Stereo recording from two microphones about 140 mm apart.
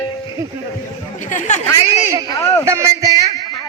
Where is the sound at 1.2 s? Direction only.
60° left (ahead or behind).